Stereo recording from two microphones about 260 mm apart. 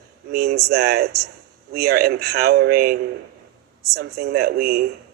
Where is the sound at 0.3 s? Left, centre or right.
Right.